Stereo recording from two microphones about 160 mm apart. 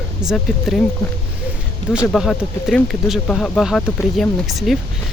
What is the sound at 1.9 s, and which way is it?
Speech, 5° right (ahead or behind).